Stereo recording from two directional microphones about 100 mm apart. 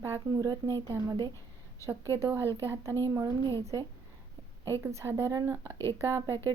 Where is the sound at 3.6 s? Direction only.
30° right (ahead or behind).